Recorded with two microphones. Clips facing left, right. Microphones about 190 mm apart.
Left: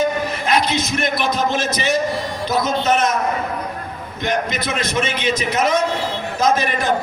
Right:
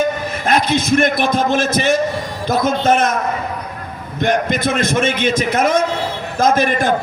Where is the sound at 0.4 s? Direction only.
50° right (ahead or behind).